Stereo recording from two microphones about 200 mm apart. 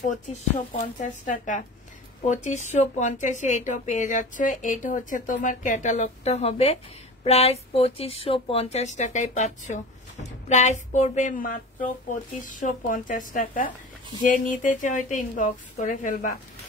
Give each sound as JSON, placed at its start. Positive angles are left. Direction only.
{"t": 0.0, "sound": "a woman's voice", "side_deg": 35}